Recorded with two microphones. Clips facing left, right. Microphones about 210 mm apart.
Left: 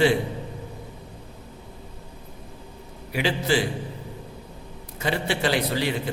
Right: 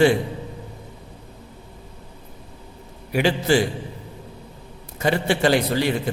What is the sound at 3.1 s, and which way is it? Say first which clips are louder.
Speech: right 5 dB; 50° right (ahead or behind).